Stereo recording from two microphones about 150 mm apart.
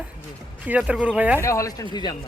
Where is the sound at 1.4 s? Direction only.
20° left (ahead or behind).